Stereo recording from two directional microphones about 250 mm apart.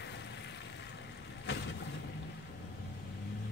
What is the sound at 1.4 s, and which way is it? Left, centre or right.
Vehicle, left.